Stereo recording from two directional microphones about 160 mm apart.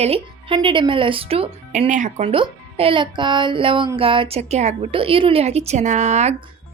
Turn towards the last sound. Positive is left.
turn(degrees=-45)  # may be behind; listen again after turning